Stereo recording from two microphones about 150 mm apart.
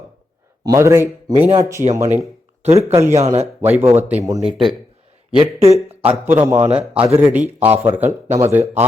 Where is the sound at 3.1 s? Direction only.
45° right (ahead or behind).